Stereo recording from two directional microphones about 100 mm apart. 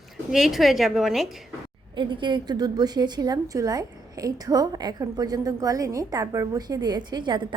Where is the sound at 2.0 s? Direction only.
55° right (ahead or behind).